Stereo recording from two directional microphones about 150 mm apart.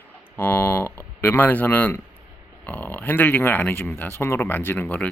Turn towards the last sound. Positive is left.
turn(degrees=10)  # may be behind; listen again after turning